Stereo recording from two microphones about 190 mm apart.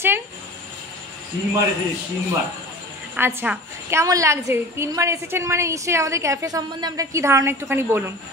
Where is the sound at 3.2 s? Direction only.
10° right (ahead or behind).